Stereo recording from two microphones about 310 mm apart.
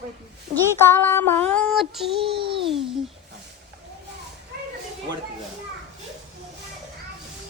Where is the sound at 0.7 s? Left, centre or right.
Centre.